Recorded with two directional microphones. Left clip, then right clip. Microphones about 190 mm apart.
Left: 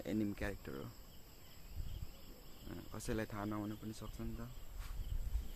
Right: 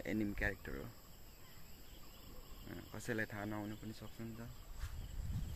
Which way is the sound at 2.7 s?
15° left (ahead or behind).